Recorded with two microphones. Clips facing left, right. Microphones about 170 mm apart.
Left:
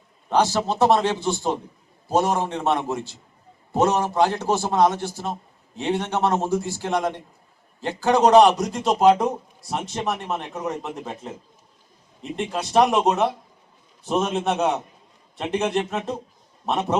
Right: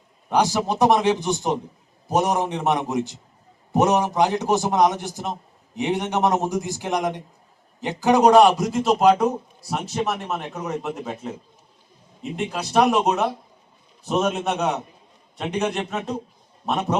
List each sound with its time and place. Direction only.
0.3 s a man's voice: 15° right (ahead or behind)